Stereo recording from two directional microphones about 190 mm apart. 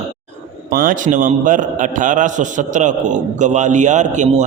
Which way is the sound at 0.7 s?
50° right (ahead or behind).